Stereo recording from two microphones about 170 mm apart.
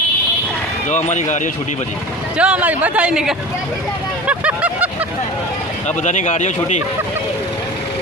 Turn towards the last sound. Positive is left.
turn(degrees=45)  # may be behind; listen again after turning